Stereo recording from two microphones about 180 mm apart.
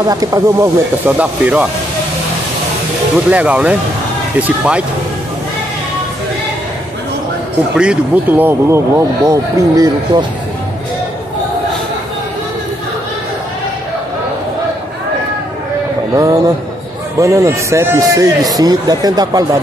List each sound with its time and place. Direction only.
0.1 s a man's voice: 20° right (ahead or behind)
1.1 s speech: 5° right (ahead or behind)
3.3 s speech: 5° right (ahead or behind)
7.7 s speech: 5° right (ahead or behind)
16.2 s a man's voice: 20° right (ahead or behind)